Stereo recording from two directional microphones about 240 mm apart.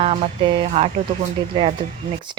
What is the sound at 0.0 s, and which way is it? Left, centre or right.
Speech, right.